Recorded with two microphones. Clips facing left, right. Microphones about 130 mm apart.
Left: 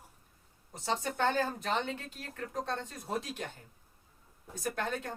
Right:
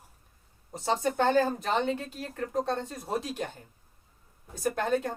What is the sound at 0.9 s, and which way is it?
Speech, 35° right (ahead or behind).